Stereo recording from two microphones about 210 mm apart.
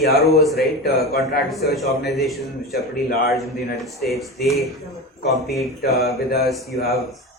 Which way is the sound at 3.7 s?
Centre (ahead or behind).